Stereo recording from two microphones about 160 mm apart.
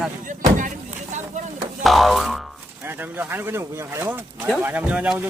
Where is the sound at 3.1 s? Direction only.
15° right (ahead or behind).